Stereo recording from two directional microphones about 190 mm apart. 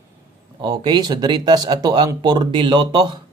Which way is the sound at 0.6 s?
25° right (ahead or behind).